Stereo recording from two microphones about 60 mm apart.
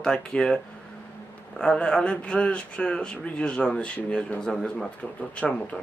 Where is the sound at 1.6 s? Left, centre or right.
Centre.